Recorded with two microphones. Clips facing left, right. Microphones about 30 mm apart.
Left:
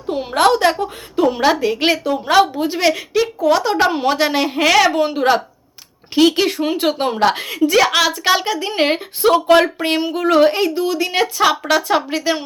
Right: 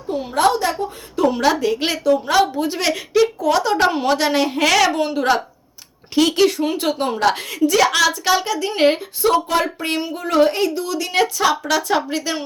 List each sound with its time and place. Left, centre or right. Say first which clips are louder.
0.1 s a woman's voice: left 2 dB; left
0.3 s a woman's voice: left 4 dB; left
1.1 s a woman's voice: left 2 dB; left
6.1 s a woman's voice: left 1 dB; centre
6.5 s a woman's voice: left 2 dB; left
9.2 s a woman's voice: left 5 dB; left
10.5 s a woman's voice: left 3 dB; left